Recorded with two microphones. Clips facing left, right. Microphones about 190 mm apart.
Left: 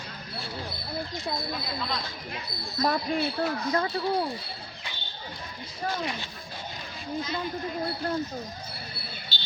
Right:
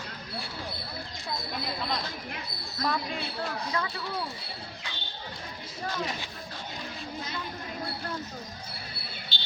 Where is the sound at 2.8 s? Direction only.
40° left (ahead or behind).